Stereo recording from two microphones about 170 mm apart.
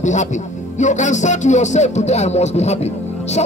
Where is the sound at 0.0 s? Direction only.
45° left (ahead or behind).